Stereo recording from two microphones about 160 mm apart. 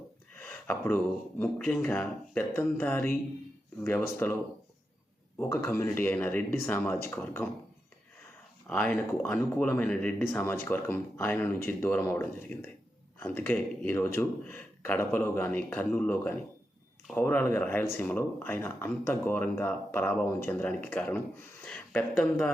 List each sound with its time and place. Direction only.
0.3 s speech: 15° left (ahead or behind)
5.4 s speech: 20° left (ahead or behind)
8.7 s speech: 10° left (ahead or behind)